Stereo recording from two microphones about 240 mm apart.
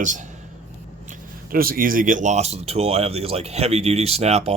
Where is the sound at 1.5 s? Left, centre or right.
Right.